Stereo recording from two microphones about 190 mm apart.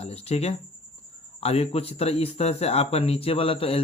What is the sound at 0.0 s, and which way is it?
Speech, 30° left (ahead or behind).